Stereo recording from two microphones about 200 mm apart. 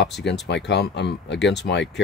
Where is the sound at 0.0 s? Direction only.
60° left (ahead or behind).